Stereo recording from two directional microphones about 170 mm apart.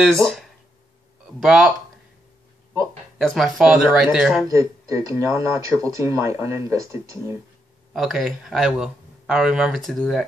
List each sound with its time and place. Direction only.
0.0 s speech: centre (ahead or behind)
3.2 s speech: centre (ahead or behind)
4.5 s speech: 20° right (ahead or behind)
7.9 s speech: centre (ahead or behind)